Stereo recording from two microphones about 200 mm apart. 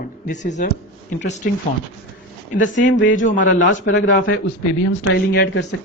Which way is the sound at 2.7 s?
65° left (ahead or behind).